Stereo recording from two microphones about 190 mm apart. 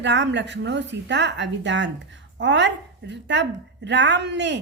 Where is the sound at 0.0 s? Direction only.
70° right (ahead or behind).